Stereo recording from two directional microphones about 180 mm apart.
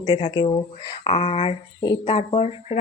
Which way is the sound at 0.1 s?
30° left (ahead or behind).